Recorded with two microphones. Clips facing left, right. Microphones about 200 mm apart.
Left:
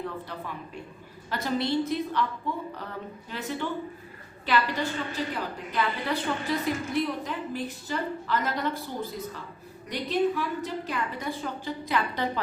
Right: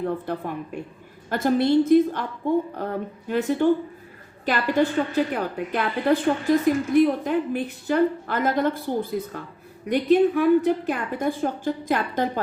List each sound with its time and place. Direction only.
0.0 s a woman's voice: 50° right (ahead or behind)